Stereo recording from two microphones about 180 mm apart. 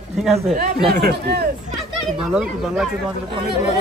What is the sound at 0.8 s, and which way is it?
Speech, 60° right (ahead or behind).